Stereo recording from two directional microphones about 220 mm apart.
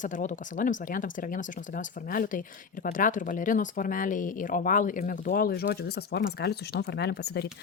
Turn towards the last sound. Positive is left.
turn(degrees=50)  # may be behind; listen again after turning